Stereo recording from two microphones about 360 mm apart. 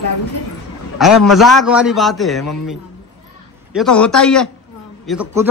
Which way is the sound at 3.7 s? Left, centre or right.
Centre.